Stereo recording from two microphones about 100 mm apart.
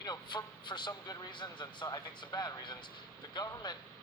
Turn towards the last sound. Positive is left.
turn(degrees=50)  # may be behind; listen again after turning